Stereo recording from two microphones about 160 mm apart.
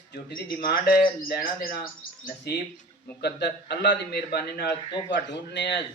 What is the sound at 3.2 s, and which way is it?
A man's voice, 90° left.